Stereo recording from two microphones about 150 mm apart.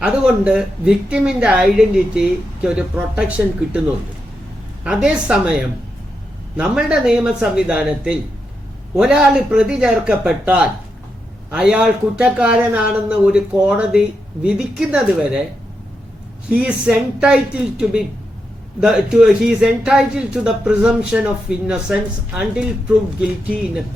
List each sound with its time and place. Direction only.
0.0 s speech: 5° right (ahead or behind)
4.8 s speech: 5° right (ahead or behind)
6.6 s speech: 5° right (ahead or behind)
16.5 s speech: 5° right (ahead or behind)
23.2 s speech: 5° right (ahead or behind)